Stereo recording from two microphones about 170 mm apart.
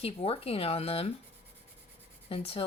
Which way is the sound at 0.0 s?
35° left (ahead or behind).